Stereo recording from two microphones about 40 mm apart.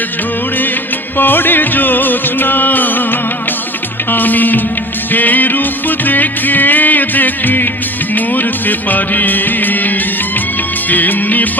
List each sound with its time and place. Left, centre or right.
1.2 s music: left